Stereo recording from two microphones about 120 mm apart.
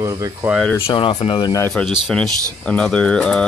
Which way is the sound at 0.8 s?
50° left (ahead or behind).